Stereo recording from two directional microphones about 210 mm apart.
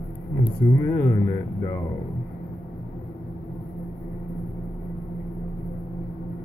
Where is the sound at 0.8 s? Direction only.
15° left (ahead or behind).